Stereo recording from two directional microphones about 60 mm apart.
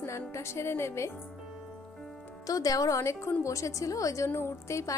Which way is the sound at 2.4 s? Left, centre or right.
Left.